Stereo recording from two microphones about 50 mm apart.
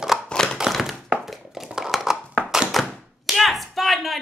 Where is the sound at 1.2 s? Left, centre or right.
Centre.